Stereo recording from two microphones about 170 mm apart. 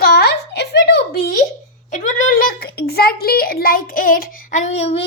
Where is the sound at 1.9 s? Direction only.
50° left (ahead or behind).